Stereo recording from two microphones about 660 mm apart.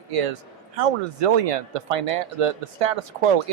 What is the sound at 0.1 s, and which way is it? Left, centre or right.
Speech, right.